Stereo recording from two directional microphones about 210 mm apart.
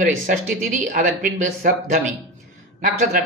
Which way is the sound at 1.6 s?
40° right (ahead or behind).